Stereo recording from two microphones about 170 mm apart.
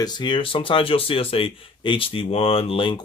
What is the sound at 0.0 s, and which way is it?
Speech, 25° left (ahead or behind).